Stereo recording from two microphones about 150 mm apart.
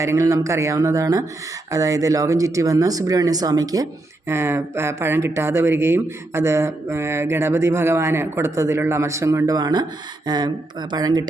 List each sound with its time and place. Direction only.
0.0 s speech: 20° right (ahead or behind)